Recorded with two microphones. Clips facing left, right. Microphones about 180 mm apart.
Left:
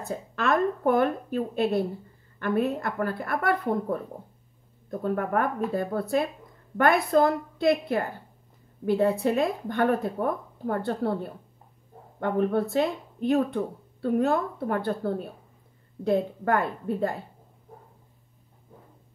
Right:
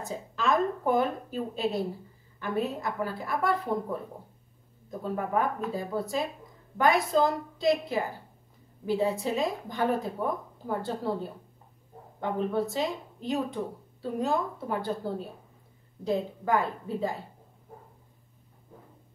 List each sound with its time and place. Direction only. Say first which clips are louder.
0.0 s a woman's voice: left 2 dB; 60° left (ahead or behind)
5.0 s a woman's voice: left 3 dB; 60° left (ahead or behind)